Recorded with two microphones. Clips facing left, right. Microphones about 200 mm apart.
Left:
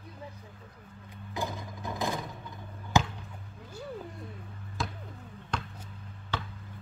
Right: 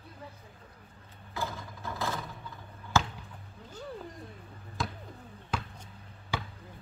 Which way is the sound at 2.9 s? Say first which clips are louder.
Left 2 dB; 15° left (ahead or behind).